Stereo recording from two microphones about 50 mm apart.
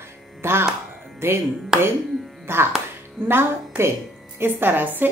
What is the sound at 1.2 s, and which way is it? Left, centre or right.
Speech, right.